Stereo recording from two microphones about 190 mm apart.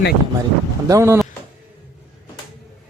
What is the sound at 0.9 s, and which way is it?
Speech, 15° right (ahead or behind).